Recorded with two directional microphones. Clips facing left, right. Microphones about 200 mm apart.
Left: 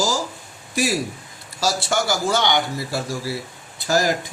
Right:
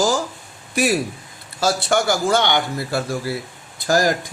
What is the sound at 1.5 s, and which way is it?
Speech, 55° right (ahead or behind).